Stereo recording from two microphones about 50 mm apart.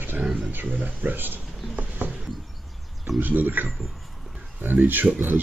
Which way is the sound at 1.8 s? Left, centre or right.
Right.